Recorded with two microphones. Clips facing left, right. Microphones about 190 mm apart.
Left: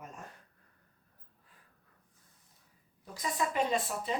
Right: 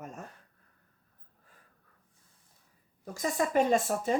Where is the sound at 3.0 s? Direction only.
45° right (ahead or behind).